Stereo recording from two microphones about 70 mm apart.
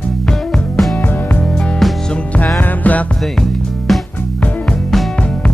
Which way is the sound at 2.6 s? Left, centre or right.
Left.